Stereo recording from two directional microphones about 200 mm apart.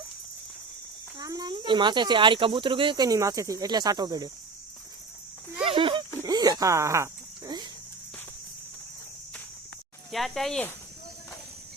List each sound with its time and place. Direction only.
1.2 s speech: 20° right (ahead or behind)
5.6 s a sound: 25° right (ahead or behind)
10.1 s speech: centre (ahead or behind)